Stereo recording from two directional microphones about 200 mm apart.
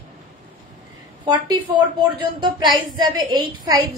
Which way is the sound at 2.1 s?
20° right (ahead or behind).